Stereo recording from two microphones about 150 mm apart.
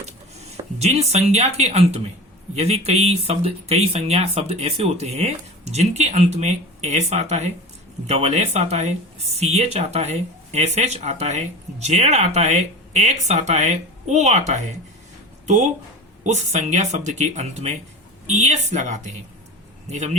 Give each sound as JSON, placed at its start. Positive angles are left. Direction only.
{"t": 0.5, "sound": "speech", "side_deg": -45}